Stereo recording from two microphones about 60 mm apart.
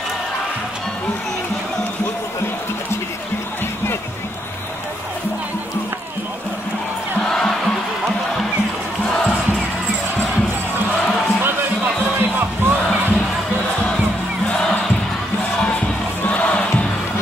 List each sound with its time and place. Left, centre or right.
7.2 s music: centre
9.0 s music: centre
12.2 s music: right
16.3 s crowd: left